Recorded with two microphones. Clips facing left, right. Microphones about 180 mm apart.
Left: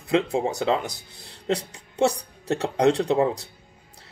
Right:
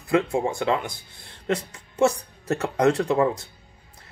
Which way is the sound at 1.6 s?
35° left (ahead or behind).